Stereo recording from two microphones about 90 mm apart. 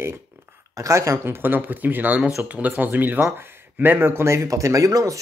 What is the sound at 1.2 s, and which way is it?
Speech, 25° right (ahead or behind).